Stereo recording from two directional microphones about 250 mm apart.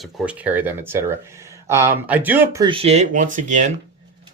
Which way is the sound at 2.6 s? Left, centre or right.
Right.